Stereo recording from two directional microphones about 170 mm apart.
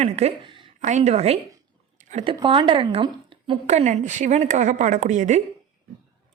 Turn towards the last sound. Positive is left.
turn(degrees=-45)  # may be behind; listen again after turning